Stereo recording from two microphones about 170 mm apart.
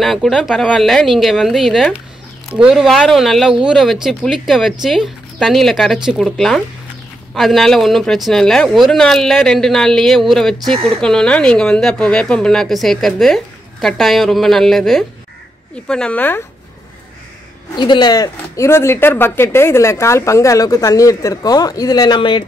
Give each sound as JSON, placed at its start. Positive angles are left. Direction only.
{"t": 0.0, "sound": "speech", "side_deg": 0}
{"t": 17.7, "sound": "speech", "side_deg": 25}